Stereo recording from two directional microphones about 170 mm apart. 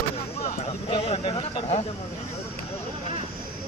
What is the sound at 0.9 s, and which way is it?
Speech, 35° left (ahead or behind).